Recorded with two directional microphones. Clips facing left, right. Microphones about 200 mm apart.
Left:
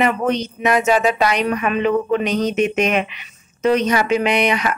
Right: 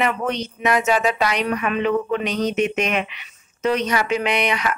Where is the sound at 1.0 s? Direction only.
20° left (ahead or behind).